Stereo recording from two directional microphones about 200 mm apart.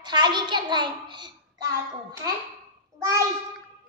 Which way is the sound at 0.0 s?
20° right (ahead or behind).